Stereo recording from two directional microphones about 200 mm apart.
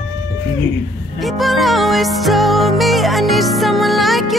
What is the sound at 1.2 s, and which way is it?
Music, centre (ahead or behind).